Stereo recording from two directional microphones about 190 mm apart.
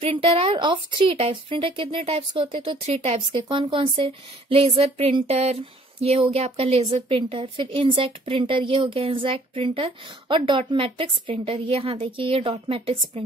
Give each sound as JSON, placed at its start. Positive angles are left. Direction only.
{"t": 0.0, "sound": "speech", "side_deg": -30}